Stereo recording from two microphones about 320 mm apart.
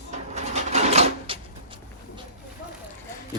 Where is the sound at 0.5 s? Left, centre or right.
Right.